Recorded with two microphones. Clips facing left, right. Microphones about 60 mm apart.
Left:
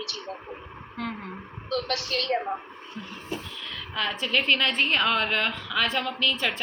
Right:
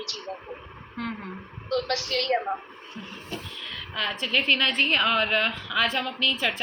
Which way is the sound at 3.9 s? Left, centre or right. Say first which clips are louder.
Even; centre.